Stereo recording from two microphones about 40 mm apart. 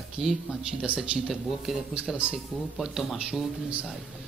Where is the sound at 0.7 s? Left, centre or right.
Right.